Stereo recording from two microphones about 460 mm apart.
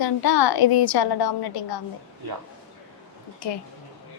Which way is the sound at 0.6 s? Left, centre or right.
Left.